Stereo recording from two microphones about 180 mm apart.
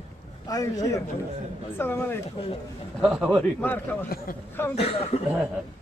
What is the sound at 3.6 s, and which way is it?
Speech, 10° left (ahead or behind).